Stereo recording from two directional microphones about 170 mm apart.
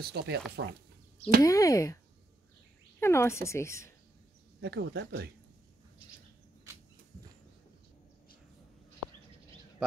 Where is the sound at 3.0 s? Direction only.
15° left (ahead or behind).